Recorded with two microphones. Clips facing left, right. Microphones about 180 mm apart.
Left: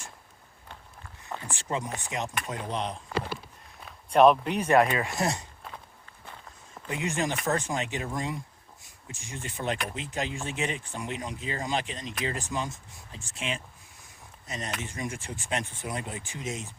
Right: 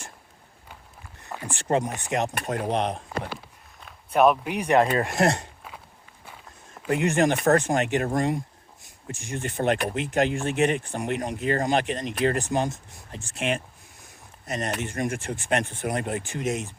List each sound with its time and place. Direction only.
1.3 s a sound: 5° right (ahead or behind)
1.6 s speech: 50° right (ahead or behind)
2.0 s speech: 70° right (ahead or behind)
3.8 s speech: 5° right (ahead or behind)
5.0 s speech: 65° right (ahead or behind)
6.8 s speech: 65° right (ahead or behind)